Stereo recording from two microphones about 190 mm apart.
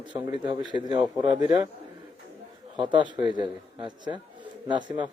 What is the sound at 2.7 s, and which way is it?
A man's voice, 25° right (ahead or behind).